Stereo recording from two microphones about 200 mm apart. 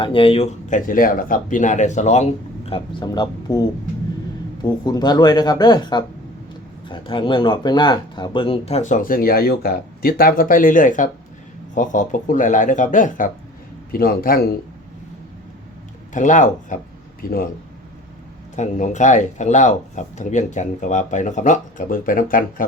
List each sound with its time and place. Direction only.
0.0 s speech: 25° left (ahead or behind)
4.9 s a man's voice: 20° left (ahead or behind); by 14.4 s 45° left (ahead or behind)
16.1 s speech: 40° left (ahead or behind)
18.5 s speech: 35° left (ahead or behind)